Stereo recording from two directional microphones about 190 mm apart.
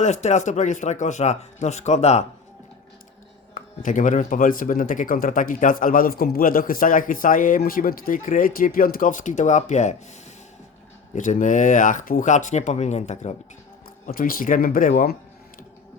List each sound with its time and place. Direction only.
0.0 s speech: 35° left (ahead or behind)
3.5 s speech: 40° left (ahead or behind)
11.1 s speech: 40° left (ahead or behind)
14.1 s speech: 50° left (ahead or behind)